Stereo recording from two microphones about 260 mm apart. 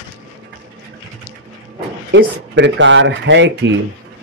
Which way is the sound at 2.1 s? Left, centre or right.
Right.